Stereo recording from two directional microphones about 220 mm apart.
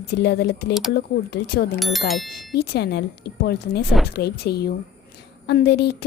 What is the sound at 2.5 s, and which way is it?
A woman's voice, 45° left (ahead or behind).